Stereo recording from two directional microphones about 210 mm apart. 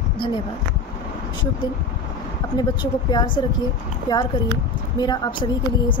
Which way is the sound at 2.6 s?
20° left (ahead or behind).